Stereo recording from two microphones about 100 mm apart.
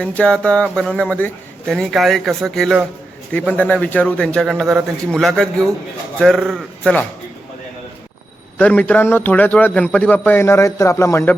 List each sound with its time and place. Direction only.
0.0 s a man's voice: 10° left (ahead or behind)
3.3 s a man's voice: 15° left (ahead or behind)
8.5 s a man's voice: 15° left (ahead or behind)